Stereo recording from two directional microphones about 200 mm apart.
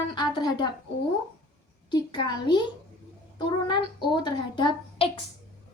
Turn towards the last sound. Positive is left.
turn(degrees=20)  # may be behind; listen again after turning